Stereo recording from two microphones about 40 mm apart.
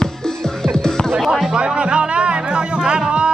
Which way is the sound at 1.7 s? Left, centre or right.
Right.